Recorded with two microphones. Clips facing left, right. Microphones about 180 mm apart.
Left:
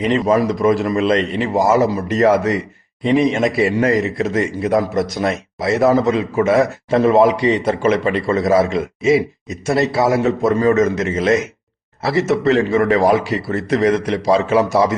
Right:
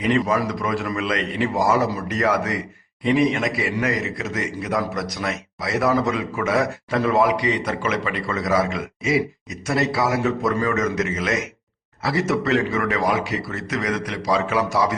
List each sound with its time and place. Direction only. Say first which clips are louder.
0.0 s a man's voice: left 5 dB; 25° left (ahead or behind)